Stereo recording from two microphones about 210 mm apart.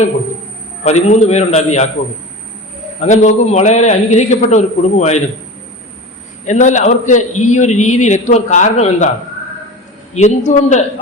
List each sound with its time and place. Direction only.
0.9 s a man's voice: 35° left (ahead or behind)
3.0 s a man's voice: 35° left (ahead or behind)
6.4 s a man's voice: 35° left (ahead or behind)
10.2 s a man's voice: 35° left (ahead or behind)